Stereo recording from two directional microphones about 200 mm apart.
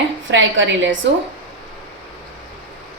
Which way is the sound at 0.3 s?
65° right (ahead or behind).